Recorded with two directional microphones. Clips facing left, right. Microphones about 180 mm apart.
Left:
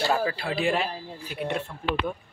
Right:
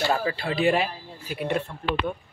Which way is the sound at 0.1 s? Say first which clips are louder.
Even; centre (ahead or behind).